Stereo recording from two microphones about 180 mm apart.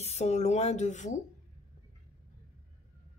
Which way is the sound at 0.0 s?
40° left (ahead or behind).